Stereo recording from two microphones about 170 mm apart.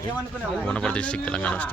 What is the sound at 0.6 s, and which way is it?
Speech, 5° left (ahead or behind).